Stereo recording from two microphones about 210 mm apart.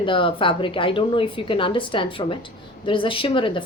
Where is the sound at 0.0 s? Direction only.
25° left (ahead or behind).